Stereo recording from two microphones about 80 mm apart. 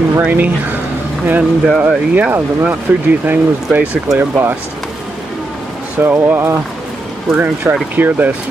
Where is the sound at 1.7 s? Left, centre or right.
Centre.